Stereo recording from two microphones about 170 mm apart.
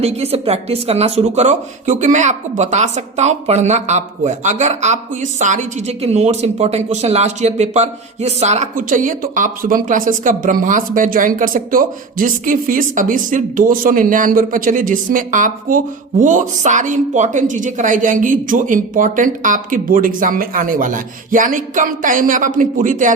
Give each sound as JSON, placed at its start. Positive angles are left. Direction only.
{"t": 0.0, "sound": "speech", "side_deg": -35}